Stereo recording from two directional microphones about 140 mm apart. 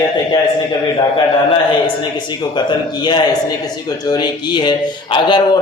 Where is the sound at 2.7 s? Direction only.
30° left (ahead or behind).